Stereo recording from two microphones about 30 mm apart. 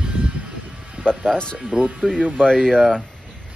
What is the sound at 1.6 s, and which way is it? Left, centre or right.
Speech, right.